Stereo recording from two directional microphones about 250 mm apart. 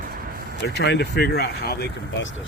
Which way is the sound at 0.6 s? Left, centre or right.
Left.